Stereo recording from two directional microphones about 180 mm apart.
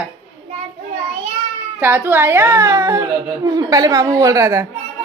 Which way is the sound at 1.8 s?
10° right (ahead or behind).